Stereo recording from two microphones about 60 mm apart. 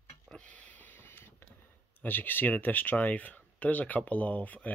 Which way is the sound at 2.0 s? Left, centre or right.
Left.